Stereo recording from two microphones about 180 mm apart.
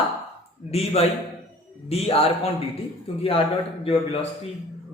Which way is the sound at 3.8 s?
30° left (ahead or behind).